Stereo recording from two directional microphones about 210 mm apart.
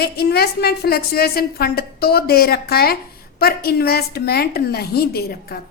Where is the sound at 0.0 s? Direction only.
50° left (ahead or behind).